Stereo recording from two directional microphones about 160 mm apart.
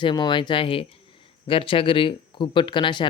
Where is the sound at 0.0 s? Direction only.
30° left (ahead or behind).